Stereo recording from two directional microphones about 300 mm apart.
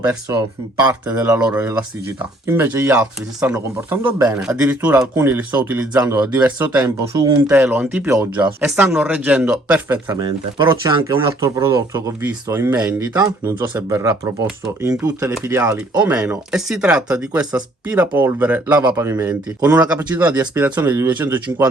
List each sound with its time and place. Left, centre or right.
0.0 s speech: centre